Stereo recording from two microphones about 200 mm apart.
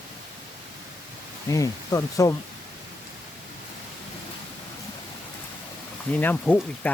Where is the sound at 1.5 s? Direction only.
15° left (ahead or behind).